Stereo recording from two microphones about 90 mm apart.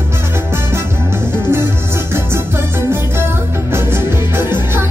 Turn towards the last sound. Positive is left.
turn(degrees=-25)  # may be behind; listen again after turning